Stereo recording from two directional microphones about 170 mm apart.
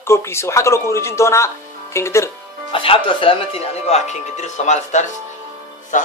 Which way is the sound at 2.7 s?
30° left (ahead or behind).